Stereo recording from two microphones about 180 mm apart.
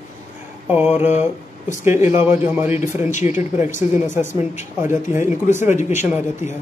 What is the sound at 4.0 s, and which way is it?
Speech, 15° right (ahead or behind).